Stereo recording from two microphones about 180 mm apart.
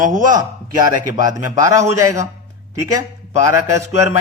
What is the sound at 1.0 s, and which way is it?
Speech, 20° right (ahead or behind).